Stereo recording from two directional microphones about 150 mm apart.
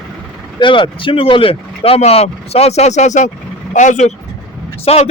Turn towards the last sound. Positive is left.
turn(degrees=40)  # may be behind; listen again after turning